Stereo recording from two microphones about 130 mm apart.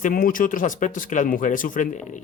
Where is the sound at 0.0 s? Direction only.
90° left.